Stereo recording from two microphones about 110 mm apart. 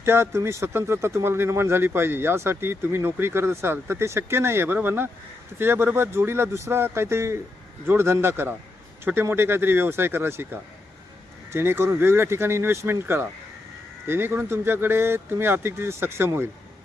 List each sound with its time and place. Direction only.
0.0 s speech: 25° right (ahead or behind)